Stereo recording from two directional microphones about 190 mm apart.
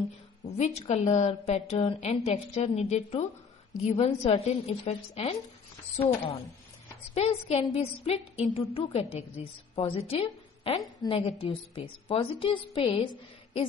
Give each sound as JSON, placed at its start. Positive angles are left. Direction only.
{"t": 0.6, "sound": "a woman's voice", "side_deg": 35}